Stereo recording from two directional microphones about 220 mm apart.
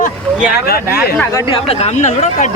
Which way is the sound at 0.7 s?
45° left (ahead or behind).